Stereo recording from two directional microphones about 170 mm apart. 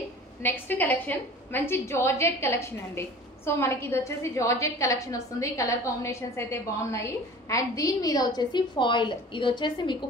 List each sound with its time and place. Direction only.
0.4 s a woman's voice: 10° left (ahead or behind); by 9.9 s 25° left (ahead or behind)